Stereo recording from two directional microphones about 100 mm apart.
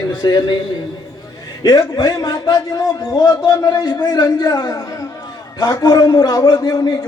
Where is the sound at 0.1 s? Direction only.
45° left (ahead or behind).